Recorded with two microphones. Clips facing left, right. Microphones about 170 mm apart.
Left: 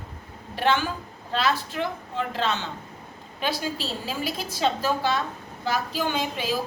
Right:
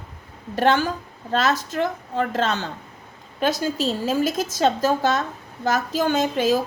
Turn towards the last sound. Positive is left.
turn(degrees=-45)  # may be behind; listen again after turning